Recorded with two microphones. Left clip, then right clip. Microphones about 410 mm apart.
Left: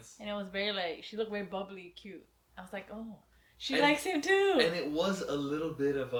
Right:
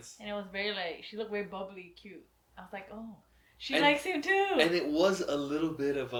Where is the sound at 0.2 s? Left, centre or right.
Left.